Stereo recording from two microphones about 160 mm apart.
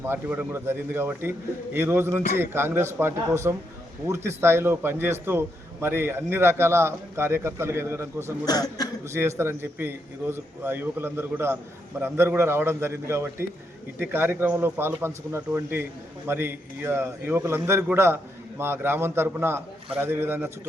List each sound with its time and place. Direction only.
0.0 s a man's voice: 10° right (ahead or behind)
8.4 s a man's voice: 25° left (ahead or behind)
9.0 s a man's voice: 15° right (ahead or behind)